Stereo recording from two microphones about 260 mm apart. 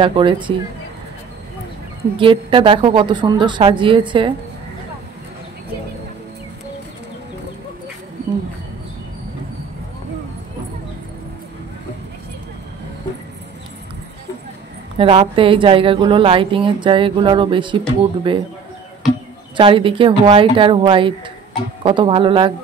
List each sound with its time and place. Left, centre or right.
0.0 s a woman's voice: centre
2.1 s a woman's voice: centre
15.0 s a woman's voice: right
19.5 s a woman's voice: centre